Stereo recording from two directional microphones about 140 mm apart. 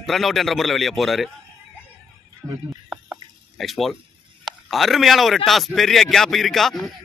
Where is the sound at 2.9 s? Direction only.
Centre (ahead or behind).